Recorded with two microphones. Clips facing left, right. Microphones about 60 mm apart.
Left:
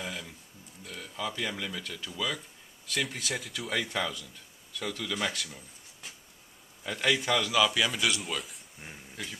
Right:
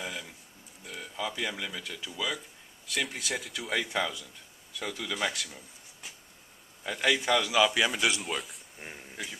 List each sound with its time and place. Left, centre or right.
0.0 s a sound: centre
0.8 s a man's voice: centre
6.8 s a man's voice: centre
8.1 s speech: centre
8.7 s a man's voice: centre